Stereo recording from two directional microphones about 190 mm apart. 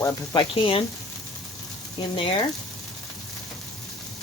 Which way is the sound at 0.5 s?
30° left (ahead or behind).